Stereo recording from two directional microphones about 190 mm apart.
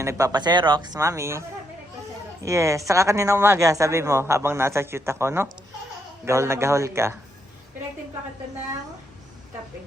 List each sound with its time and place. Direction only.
0.0 s speech: 15° right (ahead or behind)